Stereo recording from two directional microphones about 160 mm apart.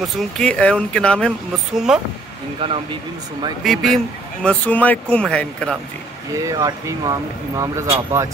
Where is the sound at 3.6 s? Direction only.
Centre (ahead or behind).